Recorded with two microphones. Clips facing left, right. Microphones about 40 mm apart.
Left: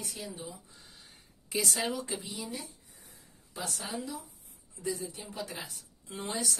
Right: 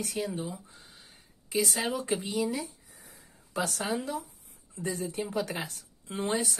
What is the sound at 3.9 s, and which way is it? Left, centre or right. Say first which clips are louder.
Speech: right 6 dB; right.